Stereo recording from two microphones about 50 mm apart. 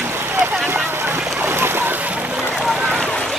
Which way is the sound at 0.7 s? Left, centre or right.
Right.